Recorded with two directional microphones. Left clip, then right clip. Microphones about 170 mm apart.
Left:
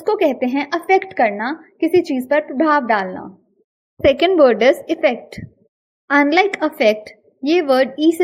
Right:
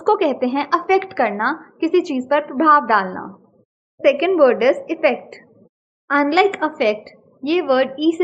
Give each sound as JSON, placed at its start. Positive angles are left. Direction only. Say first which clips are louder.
{"t": 0.0, "sound": "a woman's voice", "louder": "even", "side_deg": 30}
{"t": 4.0, "sound": "a woman's voice", "louder": "left 2 dB", "side_deg": 45}